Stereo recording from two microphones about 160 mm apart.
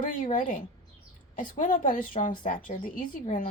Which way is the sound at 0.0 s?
55° left (ahead or behind).